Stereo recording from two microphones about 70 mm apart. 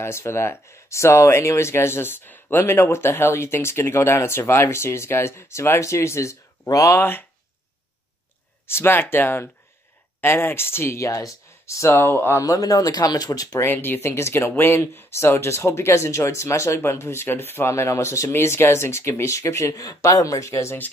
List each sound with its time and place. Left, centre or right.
0.0 s speech: left
2.6 s speech: left
7.0 s speech: left
8.6 s speech: left
12.4 s speech: left
13.6 s speech: left